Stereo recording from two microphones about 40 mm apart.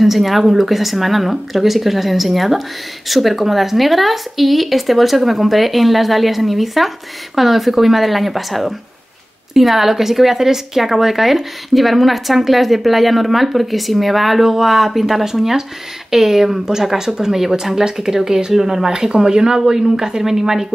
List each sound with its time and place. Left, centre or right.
0.0 s a woman's voice: centre